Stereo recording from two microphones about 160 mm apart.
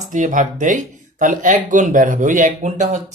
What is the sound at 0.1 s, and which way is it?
Speech, 50° right (ahead or behind).